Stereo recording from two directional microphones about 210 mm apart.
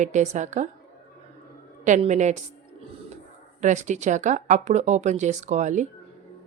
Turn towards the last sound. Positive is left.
turn(degrees=-35)  # may be behind; listen again after turning